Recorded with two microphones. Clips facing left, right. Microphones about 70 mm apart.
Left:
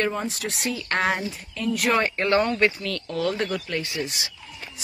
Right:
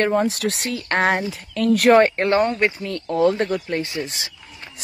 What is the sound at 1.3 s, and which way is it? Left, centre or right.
Speech, right.